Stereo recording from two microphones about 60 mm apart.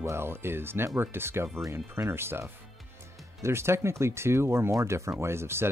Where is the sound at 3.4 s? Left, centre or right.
Right.